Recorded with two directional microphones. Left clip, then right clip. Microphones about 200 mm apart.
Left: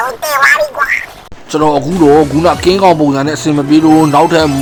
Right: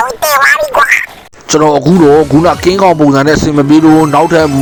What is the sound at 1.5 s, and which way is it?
Speech, 35° right (ahead or behind).